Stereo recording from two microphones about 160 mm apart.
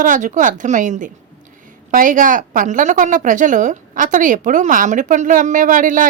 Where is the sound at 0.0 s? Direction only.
55° right (ahead or behind).